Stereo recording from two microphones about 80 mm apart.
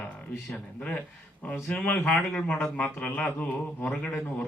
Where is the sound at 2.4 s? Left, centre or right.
Centre.